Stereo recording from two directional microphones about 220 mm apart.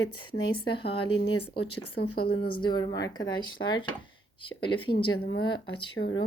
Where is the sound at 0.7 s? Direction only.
25° left (ahead or behind).